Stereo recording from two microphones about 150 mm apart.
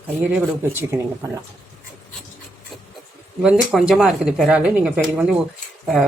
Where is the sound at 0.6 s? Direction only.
15° right (ahead or behind).